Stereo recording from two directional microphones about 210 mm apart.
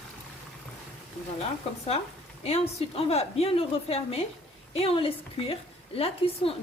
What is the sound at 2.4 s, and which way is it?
A woman's voice, 30° left (ahead or behind).